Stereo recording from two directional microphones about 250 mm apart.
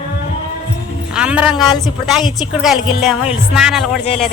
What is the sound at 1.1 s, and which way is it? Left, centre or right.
Speech, centre.